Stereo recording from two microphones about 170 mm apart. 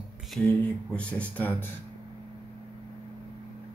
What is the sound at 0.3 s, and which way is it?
Speech, 5° left (ahead or behind).